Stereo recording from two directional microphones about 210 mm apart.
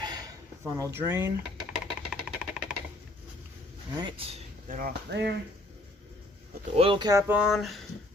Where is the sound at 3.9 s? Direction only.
25° right (ahead or behind).